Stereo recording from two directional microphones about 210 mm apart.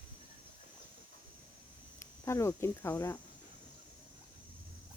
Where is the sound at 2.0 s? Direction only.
15° left (ahead or behind).